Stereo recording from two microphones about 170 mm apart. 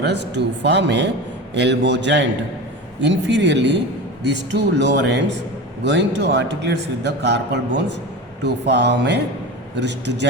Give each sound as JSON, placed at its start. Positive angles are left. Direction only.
{"t": 0.0, "sound": "a man's voice", "side_deg": -90}